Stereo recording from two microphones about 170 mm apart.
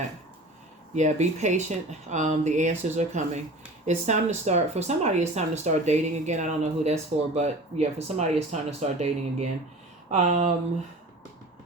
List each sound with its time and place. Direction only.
0.9 s speech: 45° right (ahead or behind)